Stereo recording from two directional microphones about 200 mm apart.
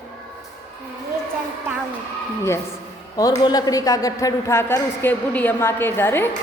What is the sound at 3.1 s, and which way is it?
A woman's voice, 20° left (ahead or behind).